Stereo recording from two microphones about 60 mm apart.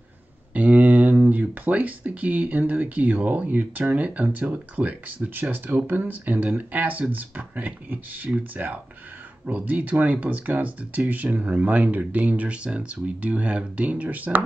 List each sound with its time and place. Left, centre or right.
0.5 s speech: right